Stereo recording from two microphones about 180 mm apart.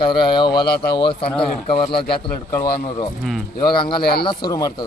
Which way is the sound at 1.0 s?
30° left (ahead or behind).